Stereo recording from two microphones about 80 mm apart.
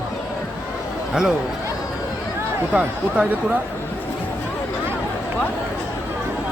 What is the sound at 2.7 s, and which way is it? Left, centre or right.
Speech, centre.